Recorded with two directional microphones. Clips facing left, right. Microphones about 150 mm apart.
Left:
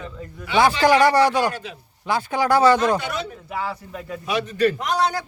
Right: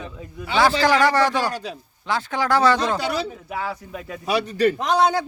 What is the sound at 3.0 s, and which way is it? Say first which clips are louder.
Speech: right 3 dB; 35° right (ahead or behind).